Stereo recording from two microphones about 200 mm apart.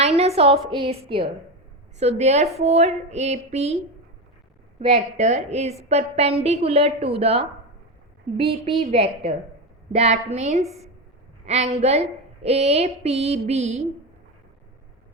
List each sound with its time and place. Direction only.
0.0 s a sound: 30° right (ahead or behind)
0.7 s a woman's voice: 30° right (ahead or behind)
4.8 s a woman's voice: 30° right (ahead or behind)